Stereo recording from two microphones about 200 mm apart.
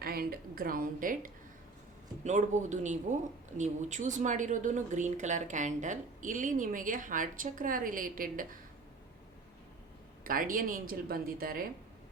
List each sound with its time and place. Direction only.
0.0 s a woman's voice: 50° right (ahead or behind)
10.2 s speech: 45° right (ahead or behind)